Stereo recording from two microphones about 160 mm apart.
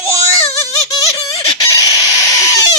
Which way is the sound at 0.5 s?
20° left (ahead or behind).